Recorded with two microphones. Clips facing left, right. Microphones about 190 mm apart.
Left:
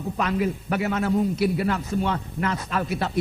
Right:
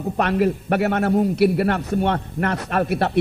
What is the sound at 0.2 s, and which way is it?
A man's voice, 65° right (ahead or behind).